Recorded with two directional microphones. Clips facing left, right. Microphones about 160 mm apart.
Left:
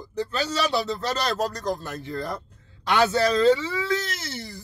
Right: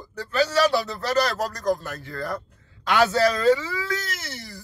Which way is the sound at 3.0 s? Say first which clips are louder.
Even; 20° left (ahead or behind).